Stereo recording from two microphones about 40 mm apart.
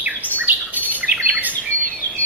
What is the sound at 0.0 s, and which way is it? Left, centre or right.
Bird, right.